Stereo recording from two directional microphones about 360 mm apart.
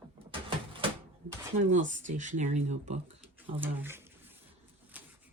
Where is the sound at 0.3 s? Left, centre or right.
Centre.